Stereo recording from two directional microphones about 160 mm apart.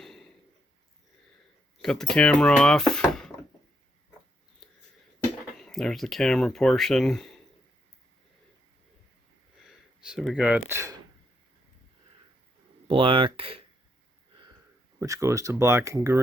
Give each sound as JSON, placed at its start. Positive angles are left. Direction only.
{"t": 0.0, "sound": "a sound", "side_deg": 0}
{"t": 1.8, "sound": "speech", "side_deg": 5}
{"t": 4.6, "sound": "a sound", "side_deg": 5}
{"t": 5.5, "sound": "speech", "side_deg": 0}
{"t": 10.0, "sound": "speech", "side_deg": -5}
{"t": 12.9, "sound": "speech", "side_deg": -35}
{"t": 14.9, "sound": "speech", "side_deg": -20}